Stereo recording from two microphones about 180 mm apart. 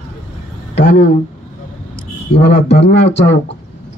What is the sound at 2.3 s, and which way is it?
A man's voice, 70° left (ahead or behind).